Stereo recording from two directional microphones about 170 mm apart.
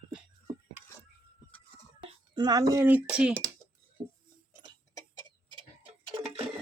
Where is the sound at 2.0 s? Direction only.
25° right (ahead or behind); by 3.3 s 5° right (ahead or behind).